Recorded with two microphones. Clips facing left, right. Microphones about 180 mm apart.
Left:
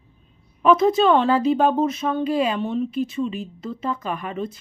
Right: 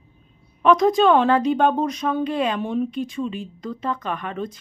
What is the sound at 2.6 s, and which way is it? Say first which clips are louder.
Speech: even; 10° right (ahead or behind).